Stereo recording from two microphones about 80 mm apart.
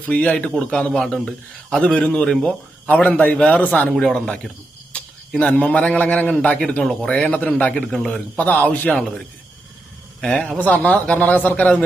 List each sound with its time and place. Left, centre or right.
0.1 s a man's voice: centre
0.9 s speech: centre
1.8 s a man's voice: centre
3.9 s a man's voice: centre
8.4 s a man's voice: centre
10.2 s a man's voice: centre